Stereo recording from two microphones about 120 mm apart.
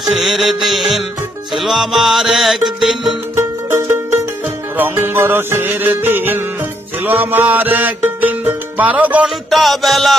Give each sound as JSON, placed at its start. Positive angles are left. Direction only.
{"t": 0.1, "sound": "music", "side_deg": 0}
{"t": 3.3, "sound": "music", "side_deg": -20}
{"t": 9.5, "sound": "music", "side_deg": 0}